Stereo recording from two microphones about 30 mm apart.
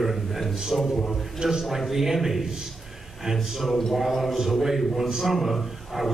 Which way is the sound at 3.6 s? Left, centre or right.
Centre.